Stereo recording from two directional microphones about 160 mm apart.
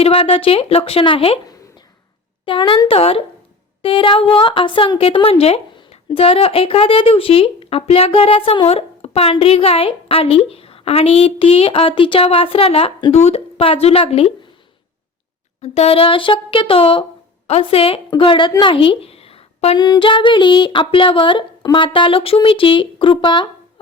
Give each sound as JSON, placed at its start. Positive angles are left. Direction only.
{"t": 0.0, "sound": "a woman's voice", "side_deg": 35}
{"t": 15.6, "sound": "a woman's voice", "side_deg": 40}